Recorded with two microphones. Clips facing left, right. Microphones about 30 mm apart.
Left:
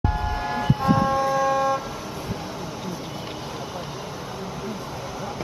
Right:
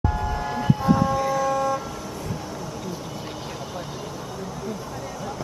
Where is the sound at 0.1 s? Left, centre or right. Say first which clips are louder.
Even; centre.